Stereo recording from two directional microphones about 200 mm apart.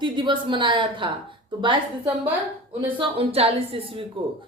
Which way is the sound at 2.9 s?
30° right (ahead or behind).